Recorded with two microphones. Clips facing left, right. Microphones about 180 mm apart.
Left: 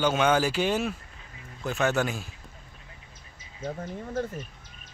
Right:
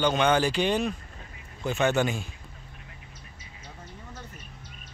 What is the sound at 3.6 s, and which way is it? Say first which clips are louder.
Speech: left 13 dB; 50° left (ahead or behind).